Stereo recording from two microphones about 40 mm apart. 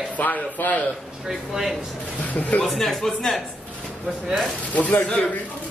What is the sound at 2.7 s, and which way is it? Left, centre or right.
Speech, centre.